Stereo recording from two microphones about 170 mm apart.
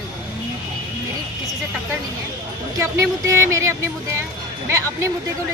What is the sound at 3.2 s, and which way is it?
Speech, 15° right (ahead or behind).